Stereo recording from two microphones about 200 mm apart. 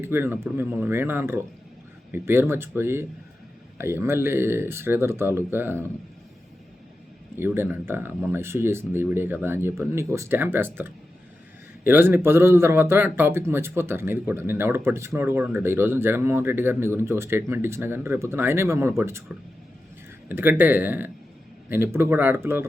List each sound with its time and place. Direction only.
0.0 s speech: 10° right (ahead or behind)
7.3 s speech: 10° right (ahead or behind)
20.2 s speech: 10° right (ahead or behind)